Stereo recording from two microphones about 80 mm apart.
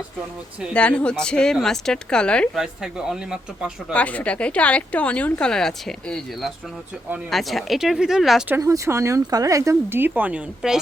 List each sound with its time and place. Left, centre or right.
0.7 s speech: centre
2.6 s speech: centre
3.9 s speech: centre
8.6 s speech: right
9.9 s speech: right
10.6 s speech: centre